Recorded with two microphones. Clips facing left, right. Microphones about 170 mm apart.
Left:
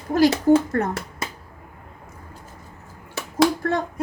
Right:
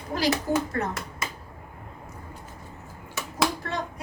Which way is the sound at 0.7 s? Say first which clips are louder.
Left 6 dB; 55° left (ahead or behind).